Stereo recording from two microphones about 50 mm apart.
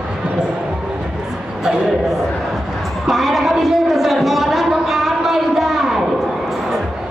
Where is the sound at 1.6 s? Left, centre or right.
Centre.